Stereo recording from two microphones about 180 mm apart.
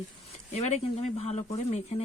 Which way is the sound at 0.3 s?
40° left (ahead or behind).